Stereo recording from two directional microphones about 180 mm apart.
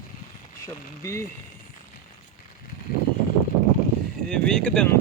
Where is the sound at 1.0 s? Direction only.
15° left (ahead or behind).